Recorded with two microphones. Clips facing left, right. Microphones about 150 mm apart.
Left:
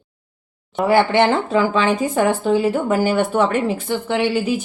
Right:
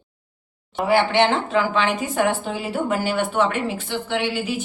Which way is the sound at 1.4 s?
35° left (ahead or behind).